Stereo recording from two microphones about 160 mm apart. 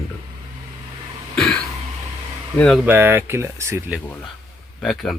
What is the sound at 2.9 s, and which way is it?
Speech, 15° right (ahead or behind).